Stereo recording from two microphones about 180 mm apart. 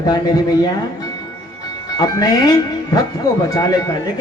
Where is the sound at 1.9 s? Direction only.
20° left (ahead or behind).